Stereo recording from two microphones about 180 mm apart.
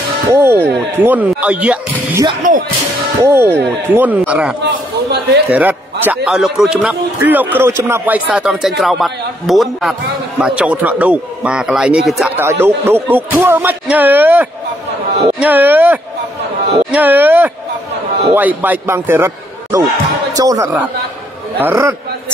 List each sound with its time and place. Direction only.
0.3 s speech: 15° right (ahead or behind)
2.4 s speech: 45° right (ahead or behind)
3.2 s speech: 15° right (ahead or behind)
4.6 s a man's voice: 70° right (ahead or behind)
5.5 s a man's voice: 10° right (ahead or behind)
12.4 s speech: 10° right (ahead or behind)